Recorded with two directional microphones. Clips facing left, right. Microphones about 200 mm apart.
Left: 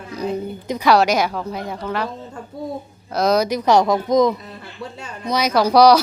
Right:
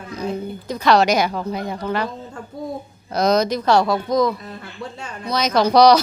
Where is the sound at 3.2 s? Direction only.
5° left (ahead or behind).